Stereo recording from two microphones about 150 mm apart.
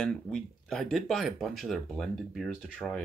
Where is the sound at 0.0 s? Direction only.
5° left (ahead or behind).